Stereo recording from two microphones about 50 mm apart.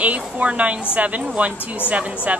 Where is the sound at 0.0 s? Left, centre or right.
Right.